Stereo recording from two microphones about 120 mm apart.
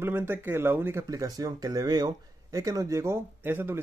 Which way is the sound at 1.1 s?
30° right (ahead or behind).